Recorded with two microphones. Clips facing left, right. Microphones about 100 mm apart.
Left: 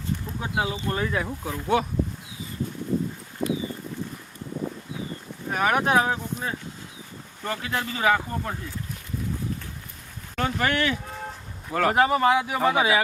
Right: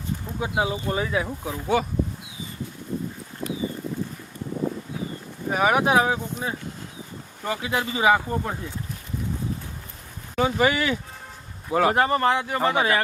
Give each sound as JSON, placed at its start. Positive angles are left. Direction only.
{"t": 0.3, "sound": "speech", "side_deg": -15}
{"t": 3.4, "sound": "a sound", "side_deg": 90}
{"t": 5.5, "sound": "speech", "side_deg": -5}
{"t": 10.3, "sound": "speech", "side_deg": -5}
{"t": 11.9, "sound": "speech", "side_deg": 5}